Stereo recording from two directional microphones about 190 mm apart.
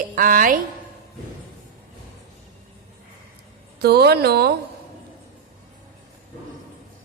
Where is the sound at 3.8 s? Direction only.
55° right (ahead or behind).